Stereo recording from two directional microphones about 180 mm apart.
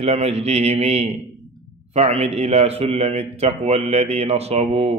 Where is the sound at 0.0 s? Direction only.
35° right (ahead or behind).